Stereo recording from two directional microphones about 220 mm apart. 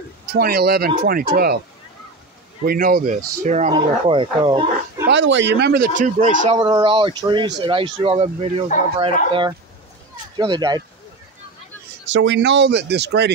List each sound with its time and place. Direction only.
0.3 s speech: 45° right (ahead or behind)
2.6 s speech: 40° right (ahead or behind)
3.7 s speech: 20° right (ahead or behind)
5.0 s speech: 55° right (ahead or behind); by 6.6 s 35° right (ahead or behind)
6.6 s speech: 20° right (ahead or behind)
12.1 s speech: 55° right (ahead or behind)